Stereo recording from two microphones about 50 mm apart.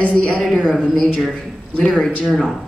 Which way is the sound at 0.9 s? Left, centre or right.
Centre.